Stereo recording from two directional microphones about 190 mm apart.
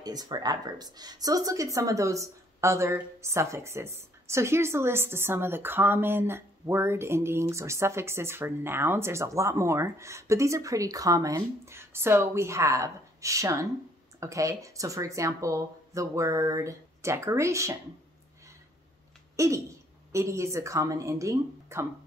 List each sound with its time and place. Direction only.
0.0 s speech: 20° right (ahead or behind)
19.3 s speech: 15° right (ahead or behind)